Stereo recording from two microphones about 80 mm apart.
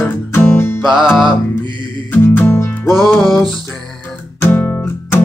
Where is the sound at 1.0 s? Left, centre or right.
Centre.